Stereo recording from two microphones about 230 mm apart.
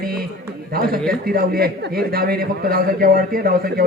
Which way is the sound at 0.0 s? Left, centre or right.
Right.